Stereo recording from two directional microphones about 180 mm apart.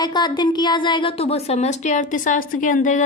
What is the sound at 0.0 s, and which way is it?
A woman's voice, 25° left (ahead or behind).